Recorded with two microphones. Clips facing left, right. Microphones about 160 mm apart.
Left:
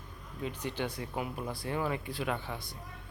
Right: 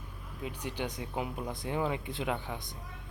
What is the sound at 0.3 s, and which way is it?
Speech, 10° right (ahead or behind).